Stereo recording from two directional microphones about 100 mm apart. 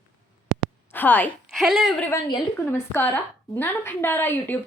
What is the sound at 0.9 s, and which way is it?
Speech, 15° left (ahead or behind).